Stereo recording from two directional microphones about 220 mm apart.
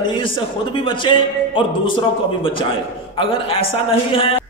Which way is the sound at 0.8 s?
20° left (ahead or behind).